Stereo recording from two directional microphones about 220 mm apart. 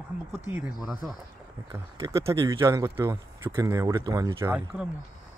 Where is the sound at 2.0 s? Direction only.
15° right (ahead or behind).